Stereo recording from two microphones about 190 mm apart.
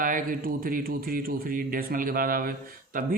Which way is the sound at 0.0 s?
45° right (ahead or behind).